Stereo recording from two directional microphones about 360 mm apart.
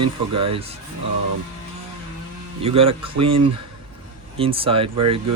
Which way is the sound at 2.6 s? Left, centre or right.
Centre.